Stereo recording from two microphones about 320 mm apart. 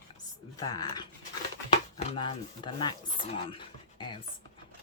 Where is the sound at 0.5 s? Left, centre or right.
Centre.